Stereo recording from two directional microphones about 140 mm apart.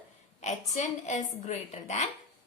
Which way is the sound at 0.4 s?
55° left (ahead or behind).